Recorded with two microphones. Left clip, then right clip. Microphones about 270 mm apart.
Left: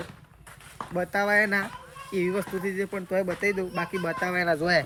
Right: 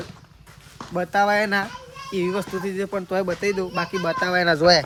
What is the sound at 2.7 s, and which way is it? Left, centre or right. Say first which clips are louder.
Speech: right 4 dB; centre.